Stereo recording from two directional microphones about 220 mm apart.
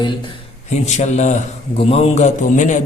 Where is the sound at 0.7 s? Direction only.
30° left (ahead or behind).